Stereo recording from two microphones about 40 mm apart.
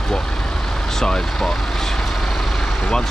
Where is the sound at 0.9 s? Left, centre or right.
Centre.